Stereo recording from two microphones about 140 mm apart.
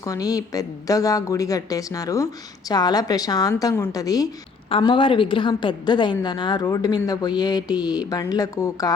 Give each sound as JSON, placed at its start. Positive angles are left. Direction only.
{"t": 0.0, "sound": "a woman's voice", "side_deg": 25}
{"t": 4.8, "sound": "a woman's voice", "side_deg": 35}